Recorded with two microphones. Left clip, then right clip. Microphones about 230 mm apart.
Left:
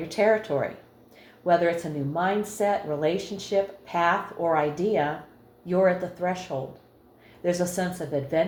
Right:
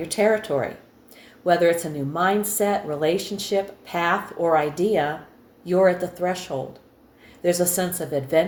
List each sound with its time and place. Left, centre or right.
0.1 s a woman's voice: right
7.4 s a woman's voice: right